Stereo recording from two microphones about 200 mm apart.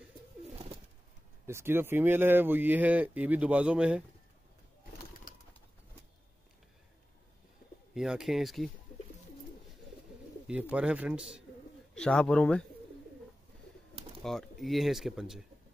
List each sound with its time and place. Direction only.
1.4 s speech: 10° right (ahead or behind)
7.9 s speech: centre (ahead or behind)
10.4 s speech: 5° right (ahead or behind)
13.9 s bird: 30° right (ahead or behind)
14.2 s speech: centre (ahead or behind)